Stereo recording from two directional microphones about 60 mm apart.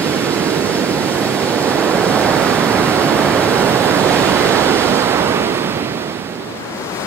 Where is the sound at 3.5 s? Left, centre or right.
Right.